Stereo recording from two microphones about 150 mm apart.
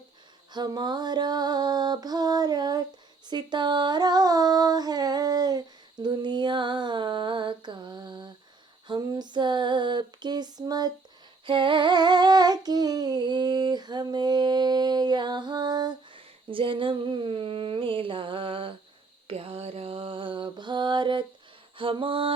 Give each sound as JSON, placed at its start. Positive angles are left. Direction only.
{"t": 0.5, "sound": "music", "side_deg": -30}
{"t": 3.2, "sound": "a sound", "side_deg": -30}
{"t": 8.9, "sound": "music", "side_deg": -30}
{"t": 11.4, "sound": "humming", "side_deg": -35}
{"t": 19.3, "sound": "mantra", "side_deg": -40}
{"t": 21.8, "sound": "a sound", "side_deg": -35}